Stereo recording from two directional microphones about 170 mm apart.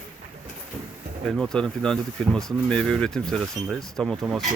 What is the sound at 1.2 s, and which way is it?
Speech, 5° left (ahead or behind).